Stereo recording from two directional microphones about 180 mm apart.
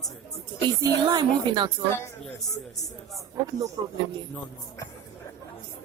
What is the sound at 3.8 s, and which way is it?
Speech, 25° right (ahead or behind).